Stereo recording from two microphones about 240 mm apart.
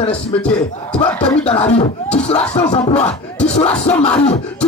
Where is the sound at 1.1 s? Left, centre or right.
Centre.